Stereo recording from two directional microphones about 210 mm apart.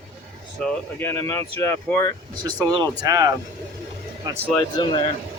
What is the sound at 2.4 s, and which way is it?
Speech, 20° right (ahead or behind).